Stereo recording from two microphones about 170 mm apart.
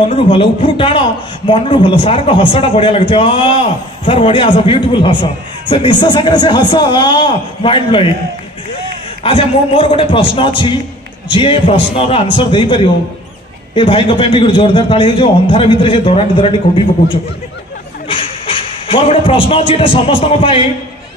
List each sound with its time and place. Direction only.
0.1 s a man's voice: 30° left (ahead or behind)
9.2 s a man's voice: 30° left (ahead or behind)